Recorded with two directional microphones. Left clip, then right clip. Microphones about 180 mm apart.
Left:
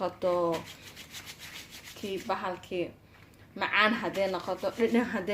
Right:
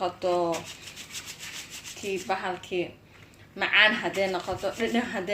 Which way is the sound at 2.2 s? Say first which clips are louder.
Right 1 dB; 55° left (ahead or behind).